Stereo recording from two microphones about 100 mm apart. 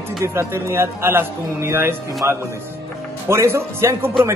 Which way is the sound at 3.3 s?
25° right (ahead or behind).